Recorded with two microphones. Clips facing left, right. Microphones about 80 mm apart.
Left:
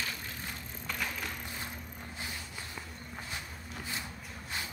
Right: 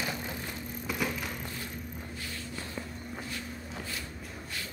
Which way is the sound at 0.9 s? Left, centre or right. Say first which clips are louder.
Right 4 dB; centre.